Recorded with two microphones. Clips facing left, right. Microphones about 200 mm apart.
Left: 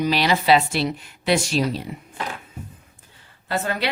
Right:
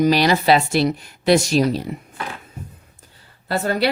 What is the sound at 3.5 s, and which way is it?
Speech, 35° right (ahead or behind).